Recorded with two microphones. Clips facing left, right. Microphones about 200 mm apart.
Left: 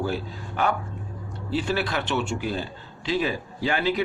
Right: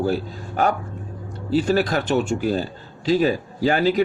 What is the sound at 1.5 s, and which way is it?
A man's voice, 40° right (ahead or behind).